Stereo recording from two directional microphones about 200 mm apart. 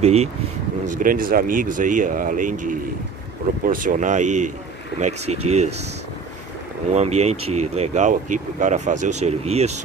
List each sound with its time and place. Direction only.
0.0 s speech: 35° right (ahead or behind)
6.9 s speech: 35° right (ahead or behind)